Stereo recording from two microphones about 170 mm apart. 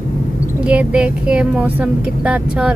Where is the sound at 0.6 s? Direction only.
5° right (ahead or behind).